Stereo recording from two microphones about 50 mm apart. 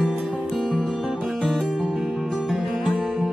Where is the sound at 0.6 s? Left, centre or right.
Centre.